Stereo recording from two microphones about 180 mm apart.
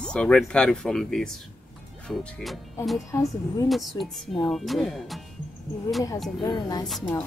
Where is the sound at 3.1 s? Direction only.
20° left (ahead or behind).